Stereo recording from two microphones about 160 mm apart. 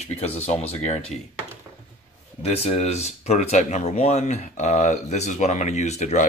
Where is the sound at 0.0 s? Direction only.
40° left (ahead or behind).